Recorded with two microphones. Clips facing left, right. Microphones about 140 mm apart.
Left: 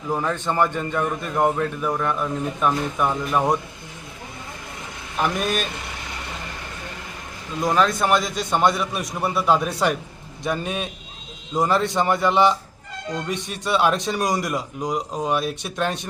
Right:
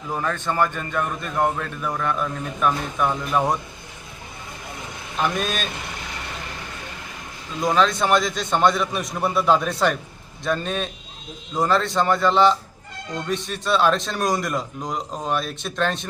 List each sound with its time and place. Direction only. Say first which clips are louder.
0.1 s a man's voice: left 2 dB; 15° left (ahead or behind)
5.2 s a man's voice: left 1 dB; 15° left (ahead or behind)
7.6 s a man's voice: even; 5° left (ahead or behind)